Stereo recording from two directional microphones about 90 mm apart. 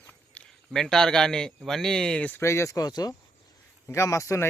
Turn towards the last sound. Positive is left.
turn(degrees=35)  # may be behind; listen again after turning